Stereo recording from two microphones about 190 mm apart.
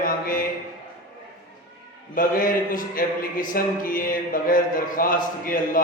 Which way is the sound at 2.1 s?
45° left (ahead or behind).